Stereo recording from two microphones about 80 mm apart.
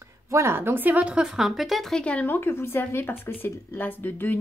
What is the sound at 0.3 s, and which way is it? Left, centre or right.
Speech, right.